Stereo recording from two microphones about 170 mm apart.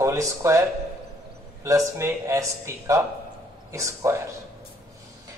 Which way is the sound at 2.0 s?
20° right (ahead or behind).